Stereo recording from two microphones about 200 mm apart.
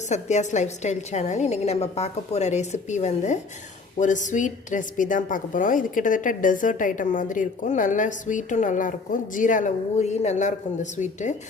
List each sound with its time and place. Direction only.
0.1 s a woman's voice: 35° left (ahead or behind)